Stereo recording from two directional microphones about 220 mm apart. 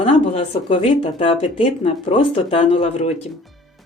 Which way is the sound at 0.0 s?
25° left (ahead or behind).